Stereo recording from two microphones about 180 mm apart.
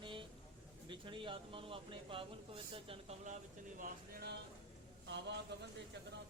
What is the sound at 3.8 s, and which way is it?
Speech, 60° right (ahead or behind).